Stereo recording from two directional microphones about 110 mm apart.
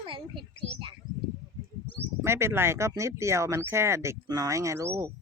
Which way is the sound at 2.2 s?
25° right (ahead or behind).